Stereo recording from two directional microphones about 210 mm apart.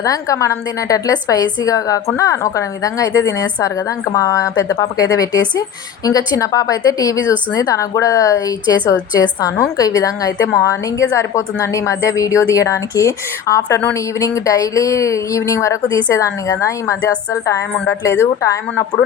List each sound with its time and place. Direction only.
0.0 s a woman's voice: 15° left (ahead or behind)